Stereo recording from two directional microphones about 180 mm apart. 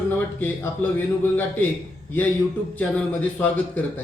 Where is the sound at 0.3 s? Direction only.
10° left (ahead or behind).